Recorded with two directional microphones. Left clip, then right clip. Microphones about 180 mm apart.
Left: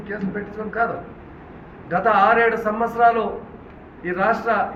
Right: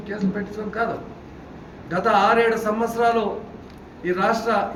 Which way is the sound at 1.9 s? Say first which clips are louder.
Left 2 dB; 10° right (ahead or behind).